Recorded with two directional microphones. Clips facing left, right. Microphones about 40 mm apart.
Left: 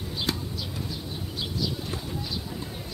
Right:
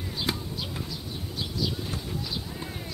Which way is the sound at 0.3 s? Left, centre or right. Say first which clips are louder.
Even; centre.